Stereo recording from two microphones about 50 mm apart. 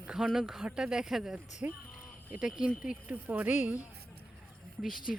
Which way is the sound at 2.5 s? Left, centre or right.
Centre.